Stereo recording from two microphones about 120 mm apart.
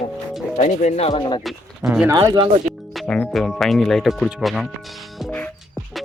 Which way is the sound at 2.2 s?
40° right (ahead or behind).